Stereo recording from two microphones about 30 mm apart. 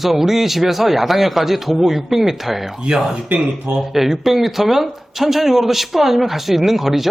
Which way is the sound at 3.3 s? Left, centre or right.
Right.